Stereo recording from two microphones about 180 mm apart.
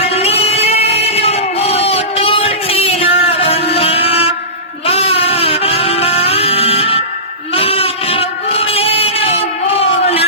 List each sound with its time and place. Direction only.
0.0 s music: 35° left (ahead or behind)